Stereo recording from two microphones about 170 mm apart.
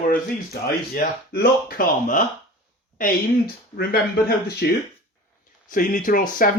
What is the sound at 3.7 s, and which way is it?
Speech, 65° left (ahead or behind).